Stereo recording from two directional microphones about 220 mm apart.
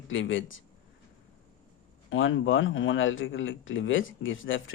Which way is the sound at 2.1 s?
60° left (ahead or behind).